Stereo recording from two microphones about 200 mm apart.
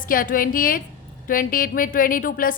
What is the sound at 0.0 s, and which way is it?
A woman's voice, 45° left (ahead or behind).